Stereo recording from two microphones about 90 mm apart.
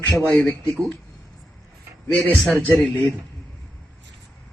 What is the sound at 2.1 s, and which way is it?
Speech, 20° left (ahead or behind).